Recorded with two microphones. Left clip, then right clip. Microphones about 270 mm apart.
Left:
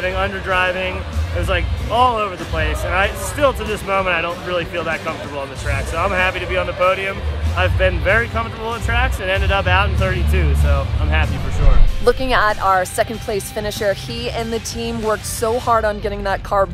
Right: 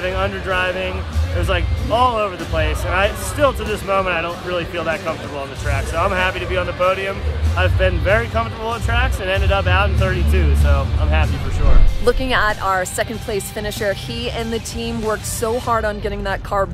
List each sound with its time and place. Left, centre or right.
0.0 s speech: centre